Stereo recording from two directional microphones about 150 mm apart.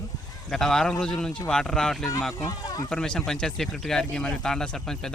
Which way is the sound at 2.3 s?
25° left (ahead or behind).